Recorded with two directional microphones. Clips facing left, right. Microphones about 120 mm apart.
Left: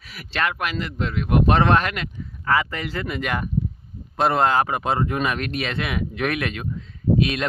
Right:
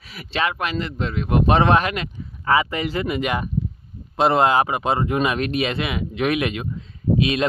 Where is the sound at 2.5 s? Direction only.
20° right (ahead or behind); by 6.3 s 5° right (ahead or behind).